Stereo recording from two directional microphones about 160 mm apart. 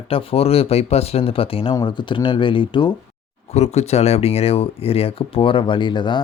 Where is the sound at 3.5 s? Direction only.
45° left (ahead or behind).